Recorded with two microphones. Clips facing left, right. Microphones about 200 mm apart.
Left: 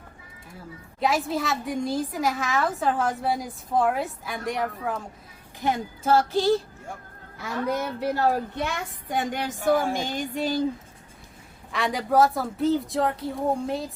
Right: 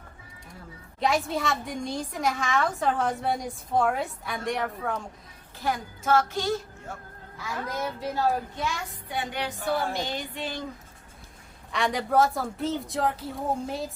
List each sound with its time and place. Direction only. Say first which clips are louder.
0.9 s a woman's voice: left 1 dB; centre (ahead or behind)
5.5 s speech: left 3 dB; 25° left (ahead or behind)
7.7 s a woman's voice: left 5 dB; 65° left (ahead or behind); by 10.6 s 40° left (ahead or behind)
11.7 s a woman's voice: left 1 dB; centre (ahead or behind)